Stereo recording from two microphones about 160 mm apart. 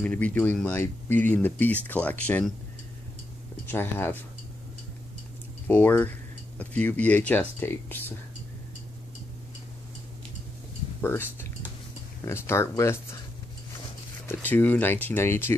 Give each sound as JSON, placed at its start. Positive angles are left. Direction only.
{"t": 0.0, "sound": "speech", "side_deg": 10}
{"t": 3.6, "sound": "speech", "side_deg": 15}
{"t": 5.7, "sound": "speech", "side_deg": 10}
{"t": 11.0, "sound": "speech", "side_deg": 15}
{"t": 14.2, "sound": "speech", "side_deg": 10}